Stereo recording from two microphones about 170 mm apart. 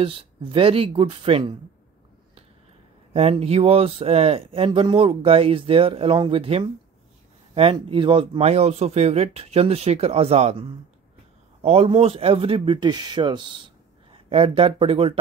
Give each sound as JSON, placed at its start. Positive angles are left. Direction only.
{"t": 0.0, "sound": "speech", "side_deg": -30}
{"t": 3.1, "sound": "speech", "side_deg": -35}